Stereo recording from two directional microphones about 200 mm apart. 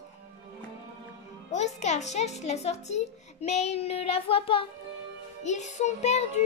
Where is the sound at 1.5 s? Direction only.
35° left (ahead or behind).